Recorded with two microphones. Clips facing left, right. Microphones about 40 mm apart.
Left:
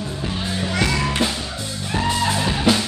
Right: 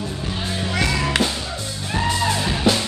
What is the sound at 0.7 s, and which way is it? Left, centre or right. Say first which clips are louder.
Music: even; centre.